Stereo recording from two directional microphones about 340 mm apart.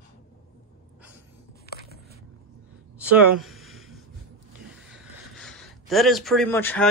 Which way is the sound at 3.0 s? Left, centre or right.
Centre.